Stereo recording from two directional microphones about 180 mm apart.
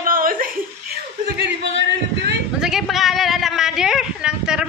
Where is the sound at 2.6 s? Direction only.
Centre (ahead or behind).